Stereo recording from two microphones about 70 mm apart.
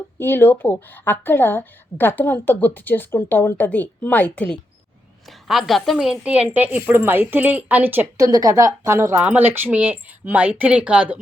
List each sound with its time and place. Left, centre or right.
0.2 s speech: left
5.5 s a woman's voice: centre
6.0 s speech: centre
8.2 s a woman's voice: right
9.2 s speech: right